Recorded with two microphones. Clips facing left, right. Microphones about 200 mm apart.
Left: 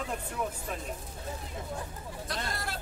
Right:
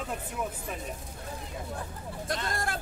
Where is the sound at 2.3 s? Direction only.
50° right (ahead or behind).